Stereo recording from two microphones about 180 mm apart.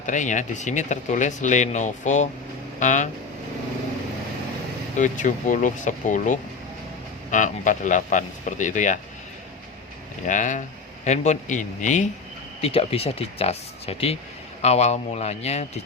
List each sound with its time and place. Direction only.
0.0 s speech: 45° left (ahead or behind)
4.9 s speech: 45° left (ahead or behind)
10.2 s speech: 45° left (ahead or behind)
12.6 s speech: 30° left (ahead or behind)